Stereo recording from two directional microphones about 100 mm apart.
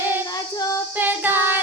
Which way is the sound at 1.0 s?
20° right (ahead or behind).